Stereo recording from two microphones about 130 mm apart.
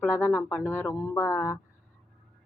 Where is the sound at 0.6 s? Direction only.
15° left (ahead or behind).